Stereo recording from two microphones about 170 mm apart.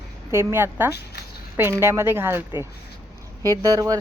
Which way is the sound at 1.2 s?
70° left (ahead or behind).